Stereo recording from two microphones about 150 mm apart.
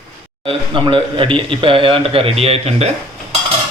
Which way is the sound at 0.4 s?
35° right (ahead or behind).